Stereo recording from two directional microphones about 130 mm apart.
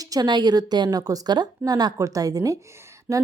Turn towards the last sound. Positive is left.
turn(degrees=-25)  # may be behind; listen again after turning